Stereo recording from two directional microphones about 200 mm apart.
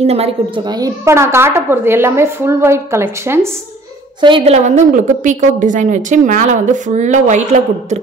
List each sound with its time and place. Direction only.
0.0 s a woman's voice: 30° right (ahead or behind)
0.7 s a woman's voice: 20° right (ahead or behind)
4.2 s a woman's voice: 25° right (ahead or behind)